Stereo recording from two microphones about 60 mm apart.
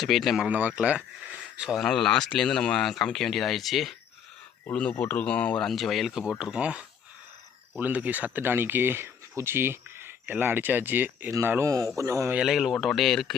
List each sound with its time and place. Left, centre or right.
0.0 s speech: centre
0.4 s speech: right
1.7 s speech: centre
4.7 s speech: left
5.6 s speech: centre
6.4 s speech: centre
11.6 s a man's voice: right
11.9 s speech: right
12.4 s speech: centre
12.9 s speech: centre